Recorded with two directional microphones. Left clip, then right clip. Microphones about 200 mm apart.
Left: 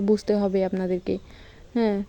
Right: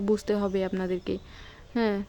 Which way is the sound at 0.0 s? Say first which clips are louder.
Left 4 dB; 5° left (ahead or behind).